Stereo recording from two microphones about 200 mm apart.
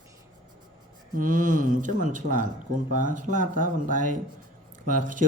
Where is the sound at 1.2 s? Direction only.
40° right (ahead or behind).